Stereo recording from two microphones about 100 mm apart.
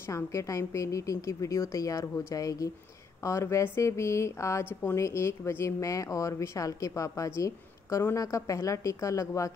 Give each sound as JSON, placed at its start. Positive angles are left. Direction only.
{"t": 0.1, "sound": "speech", "side_deg": 30}